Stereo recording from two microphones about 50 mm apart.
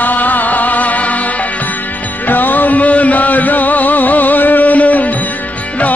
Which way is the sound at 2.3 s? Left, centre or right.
Left.